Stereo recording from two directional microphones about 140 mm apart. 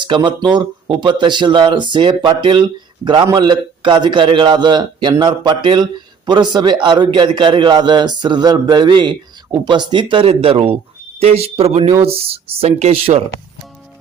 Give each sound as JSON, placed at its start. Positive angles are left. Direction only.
{"t": 0.1, "sound": "speech", "side_deg": -35}